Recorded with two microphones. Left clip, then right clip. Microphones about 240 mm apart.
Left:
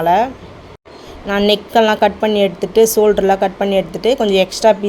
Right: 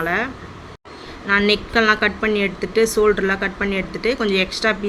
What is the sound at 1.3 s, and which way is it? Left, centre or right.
Speech, centre.